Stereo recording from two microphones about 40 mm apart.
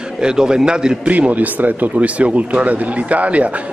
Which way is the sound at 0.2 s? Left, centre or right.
Centre.